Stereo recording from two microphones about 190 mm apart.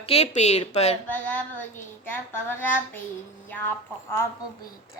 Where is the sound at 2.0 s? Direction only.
10° left (ahead or behind).